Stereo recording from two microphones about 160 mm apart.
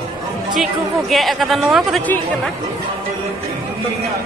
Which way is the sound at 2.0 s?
10° left (ahead or behind).